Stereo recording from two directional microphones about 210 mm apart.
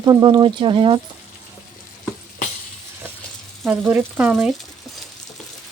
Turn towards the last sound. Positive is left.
turn(degrees=-5)  # may be behind; listen again after turning